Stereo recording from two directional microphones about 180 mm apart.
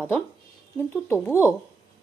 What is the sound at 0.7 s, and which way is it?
Speech, 10° left (ahead or behind).